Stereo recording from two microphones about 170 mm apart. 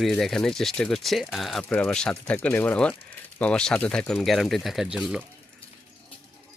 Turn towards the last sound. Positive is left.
turn(degrees=-5)  # may be behind; listen again after turning